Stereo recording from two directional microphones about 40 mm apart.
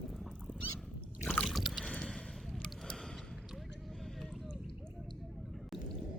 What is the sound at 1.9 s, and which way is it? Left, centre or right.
Squish, centre.